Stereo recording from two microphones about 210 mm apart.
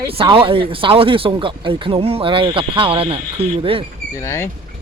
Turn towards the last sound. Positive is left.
turn(degrees=15)  # may be behind; listen again after turning